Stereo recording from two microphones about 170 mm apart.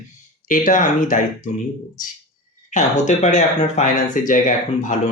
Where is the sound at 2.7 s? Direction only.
45° left (ahead or behind).